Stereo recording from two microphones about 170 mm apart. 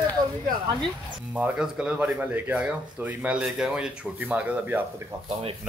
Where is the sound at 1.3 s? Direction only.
5° right (ahead or behind).